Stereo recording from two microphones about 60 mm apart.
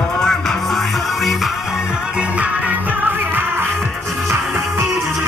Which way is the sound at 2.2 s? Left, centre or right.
Right.